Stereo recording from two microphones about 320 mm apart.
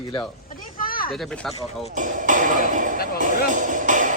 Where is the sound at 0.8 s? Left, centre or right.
Left.